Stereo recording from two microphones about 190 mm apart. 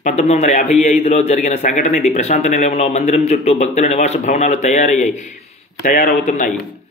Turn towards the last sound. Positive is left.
turn(degrees=40)  # may be behind; listen again after turning